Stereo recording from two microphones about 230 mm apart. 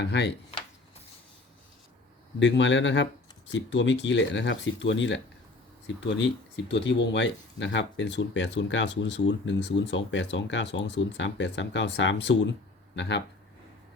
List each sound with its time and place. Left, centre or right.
0.0 s speech: left
2.4 s speech: left
6.7 s speech: left